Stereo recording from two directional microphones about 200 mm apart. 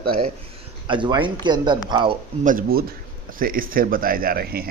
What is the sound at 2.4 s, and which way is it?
A man's voice, 45° right (ahead or behind).